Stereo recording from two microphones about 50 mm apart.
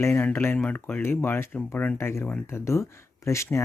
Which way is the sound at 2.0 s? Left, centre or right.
Left.